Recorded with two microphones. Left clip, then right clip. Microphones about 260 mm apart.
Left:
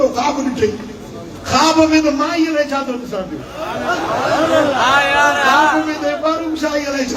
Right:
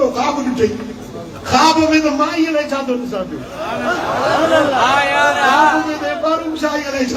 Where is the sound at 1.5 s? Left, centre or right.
Centre.